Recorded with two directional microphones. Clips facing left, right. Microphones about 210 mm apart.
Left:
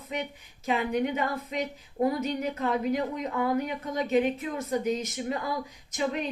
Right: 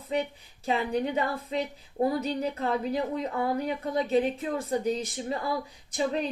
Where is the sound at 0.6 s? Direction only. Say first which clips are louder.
Left 1 dB; 30° right (ahead or behind).